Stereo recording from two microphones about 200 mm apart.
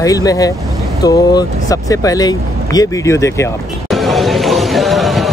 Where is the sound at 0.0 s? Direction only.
15° left (ahead or behind).